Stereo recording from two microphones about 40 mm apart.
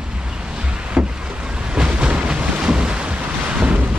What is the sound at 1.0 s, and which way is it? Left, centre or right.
Boat, centre.